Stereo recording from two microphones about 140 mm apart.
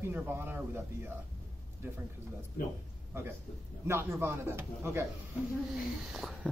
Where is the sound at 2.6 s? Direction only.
90° left.